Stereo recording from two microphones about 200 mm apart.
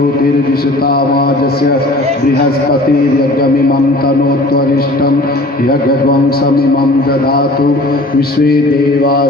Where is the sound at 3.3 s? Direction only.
50° left (ahead or behind).